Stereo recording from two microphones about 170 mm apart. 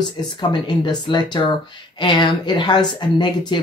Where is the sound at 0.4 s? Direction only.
25° left (ahead or behind).